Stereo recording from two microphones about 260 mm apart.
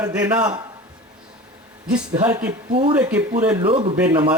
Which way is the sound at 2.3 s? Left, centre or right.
Right.